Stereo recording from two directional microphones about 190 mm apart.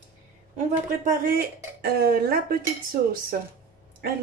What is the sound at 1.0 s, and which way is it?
Speech, 50° right (ahead or behind).